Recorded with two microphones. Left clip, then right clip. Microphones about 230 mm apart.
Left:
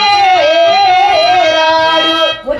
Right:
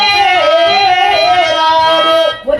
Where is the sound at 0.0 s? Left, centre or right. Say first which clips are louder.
Left 1 dB; right.